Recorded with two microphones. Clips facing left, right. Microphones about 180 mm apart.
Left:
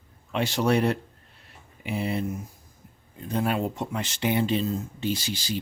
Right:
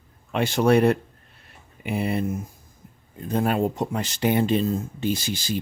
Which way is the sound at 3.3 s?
45° right (ahead or behind).